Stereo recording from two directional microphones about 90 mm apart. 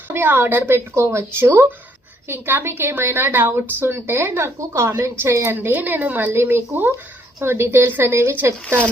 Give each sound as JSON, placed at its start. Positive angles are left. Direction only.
{"t": 0.1, "sound": "speech", "side_deg": -20}